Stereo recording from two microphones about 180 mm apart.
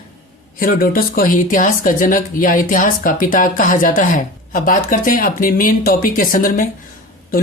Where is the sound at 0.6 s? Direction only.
55° left (ahead or behind).